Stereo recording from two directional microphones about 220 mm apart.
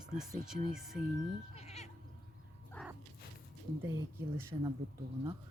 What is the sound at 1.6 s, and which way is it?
Sheep, 30° left (ahead or behind).